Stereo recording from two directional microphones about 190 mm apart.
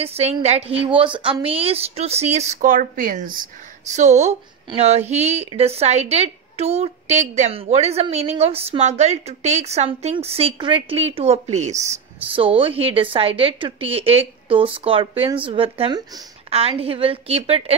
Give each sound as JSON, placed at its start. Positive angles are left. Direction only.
{"t": 0.0, "sound": "a woman's voice", "side_deg": -35}